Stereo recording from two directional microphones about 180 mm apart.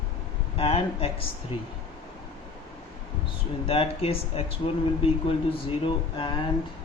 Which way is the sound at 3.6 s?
35° left (ahead or behind).